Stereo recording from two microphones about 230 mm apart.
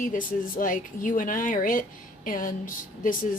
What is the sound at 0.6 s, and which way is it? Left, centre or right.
A woman's voice, left.